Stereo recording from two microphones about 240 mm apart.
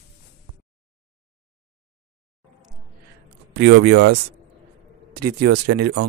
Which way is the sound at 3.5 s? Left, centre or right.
Right.